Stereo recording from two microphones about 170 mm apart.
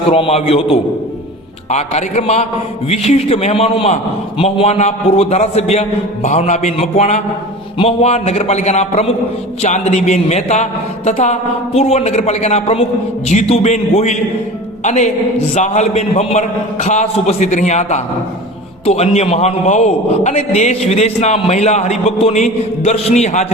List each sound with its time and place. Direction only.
0.1 s a man's voice: 35° left (ahead or behind)